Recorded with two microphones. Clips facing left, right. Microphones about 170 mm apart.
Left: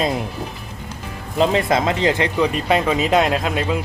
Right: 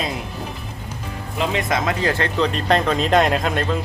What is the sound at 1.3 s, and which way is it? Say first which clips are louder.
Speech: left 5 dB; 30° left (ahead or behind).